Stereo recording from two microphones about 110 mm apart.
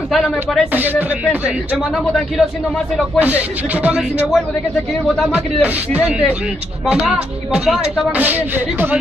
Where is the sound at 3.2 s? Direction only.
15° right (ahead or behind).